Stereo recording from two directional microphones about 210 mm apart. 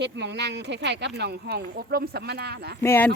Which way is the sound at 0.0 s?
55° right (ahead or behind).